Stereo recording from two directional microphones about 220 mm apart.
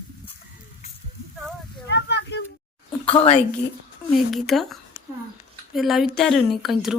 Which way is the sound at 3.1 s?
25° left (ahead or behind).